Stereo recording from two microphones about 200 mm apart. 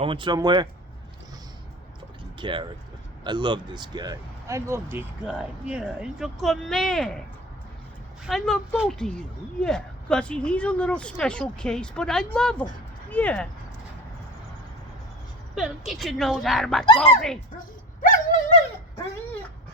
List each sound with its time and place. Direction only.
0.0 s speech: 25° right (ahead or behind)
2.4 s speech: 25° right (ahead or behind); by 7.2 s centre (ahead or behind)
8.3 s a woman's voice: centre (ahead or behind)
15.5 s a woman's voice: centre (ahead or behind)
16.8 s speech: 25° left (ahead or behind)
18.0 s dog: 40° left (ahead or behind)